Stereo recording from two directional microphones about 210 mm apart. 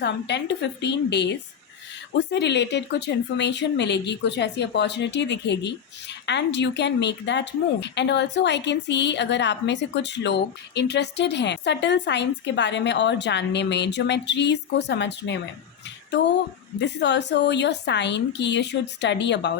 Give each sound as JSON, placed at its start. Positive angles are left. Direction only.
{"t": 0.0, "sound": "speech", "side_deg": 55}
{"t": 16.8, "sound": "speech", "side_deg": 55}